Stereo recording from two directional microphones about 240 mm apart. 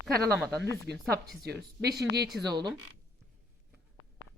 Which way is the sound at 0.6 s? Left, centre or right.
Right.